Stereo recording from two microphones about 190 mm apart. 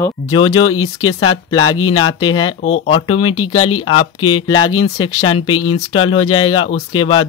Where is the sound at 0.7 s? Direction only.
90° left.